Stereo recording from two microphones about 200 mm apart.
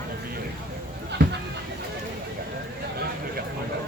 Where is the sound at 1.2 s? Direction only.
55° right (ahead or behind).